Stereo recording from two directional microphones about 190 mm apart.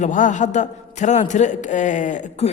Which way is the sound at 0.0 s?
40° left (ahead or behind).